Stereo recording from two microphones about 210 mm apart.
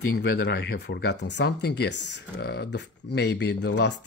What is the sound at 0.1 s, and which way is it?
Speech, 45° left (ahead or behind).